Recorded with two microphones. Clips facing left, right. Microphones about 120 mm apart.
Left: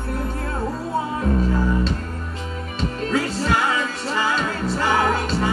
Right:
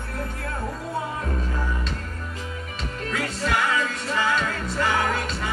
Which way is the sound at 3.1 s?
30° left (ahead or behind).